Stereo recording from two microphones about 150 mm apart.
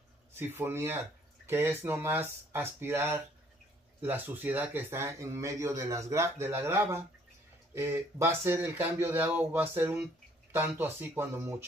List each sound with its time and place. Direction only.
0.3 s speech: 15° right (ahead or behind)